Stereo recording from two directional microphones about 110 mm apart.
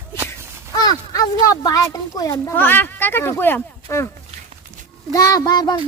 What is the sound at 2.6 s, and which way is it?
Speech, 20° left (ahead or behind).